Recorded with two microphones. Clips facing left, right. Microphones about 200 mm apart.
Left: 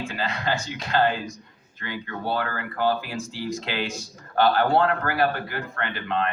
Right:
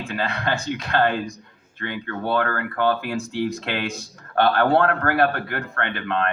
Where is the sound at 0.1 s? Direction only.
60° right (ahead or behind).